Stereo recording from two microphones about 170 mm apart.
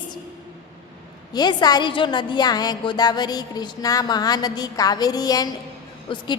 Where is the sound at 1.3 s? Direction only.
25° left (ahead or behind).